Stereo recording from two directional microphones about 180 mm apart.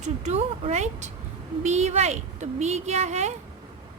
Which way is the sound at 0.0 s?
35° right (ahead or behind).